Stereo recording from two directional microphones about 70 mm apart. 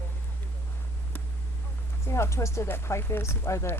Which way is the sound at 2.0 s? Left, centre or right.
Left.